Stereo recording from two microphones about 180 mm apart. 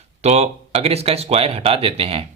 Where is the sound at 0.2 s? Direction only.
35° right (ahead or behind).